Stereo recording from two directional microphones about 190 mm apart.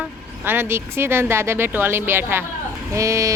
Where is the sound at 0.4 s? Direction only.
10° right (ahead or behind).